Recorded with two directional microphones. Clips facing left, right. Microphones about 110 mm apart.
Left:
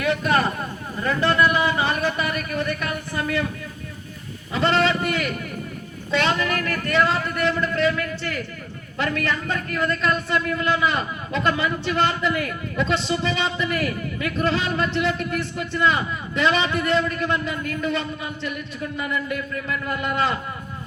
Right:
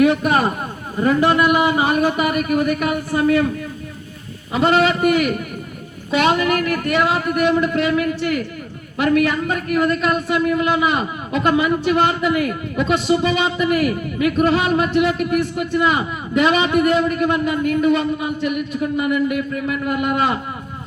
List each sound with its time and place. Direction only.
0.0 s a man's voice: 20° right (ahead or behind)
4.5 s a man's voice: 15° right (ahead or behind)